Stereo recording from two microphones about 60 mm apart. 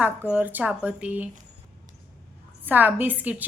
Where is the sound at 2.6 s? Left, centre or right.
Right.